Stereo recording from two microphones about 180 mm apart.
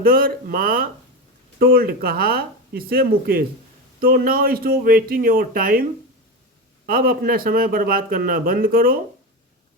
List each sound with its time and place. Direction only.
0.0 s a man's voice: 55° right (ahead or behind)